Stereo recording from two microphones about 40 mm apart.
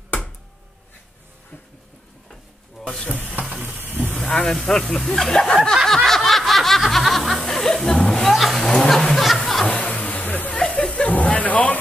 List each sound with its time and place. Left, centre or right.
2.8 s speech: centre
3.3 s a sound: right
4.3 s speech: centre
5.9 s snicker: centre
7.4 s music: centre
8.1 s a sound: centre
8.7 s speech: centre
9.4 s music: centre
9.8 s a sound: left